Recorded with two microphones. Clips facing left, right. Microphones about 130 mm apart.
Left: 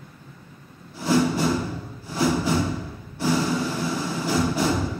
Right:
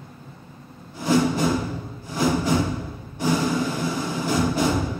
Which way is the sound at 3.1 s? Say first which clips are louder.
Right 1 dB; 15° right (ahead or behind).